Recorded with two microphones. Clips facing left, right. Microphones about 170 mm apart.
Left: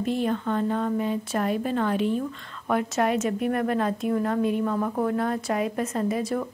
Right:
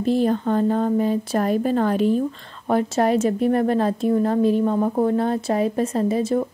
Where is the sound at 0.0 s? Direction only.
35° right (ahead or behind).